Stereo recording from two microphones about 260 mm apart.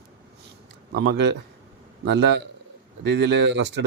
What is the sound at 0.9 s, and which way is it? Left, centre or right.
Speech, right.